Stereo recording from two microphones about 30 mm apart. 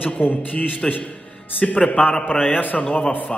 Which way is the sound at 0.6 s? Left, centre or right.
Left.